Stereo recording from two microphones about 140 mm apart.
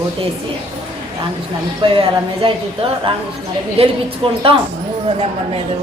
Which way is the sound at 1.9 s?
40° right (ahead or behind).